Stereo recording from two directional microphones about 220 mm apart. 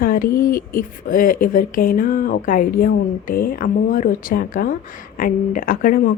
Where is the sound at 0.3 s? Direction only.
40° left (ahead or behind).